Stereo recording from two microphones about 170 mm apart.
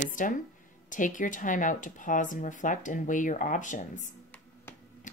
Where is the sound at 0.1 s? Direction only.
50° left (ahead or behind).